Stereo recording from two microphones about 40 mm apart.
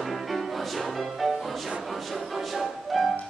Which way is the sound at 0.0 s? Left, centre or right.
Centre.